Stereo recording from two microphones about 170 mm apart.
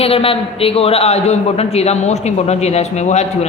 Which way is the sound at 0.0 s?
35° left (ahead or behind).